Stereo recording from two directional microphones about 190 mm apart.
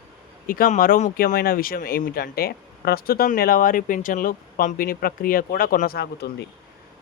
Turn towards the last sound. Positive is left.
turn(degrees=60)  # may be behind; listen again after turning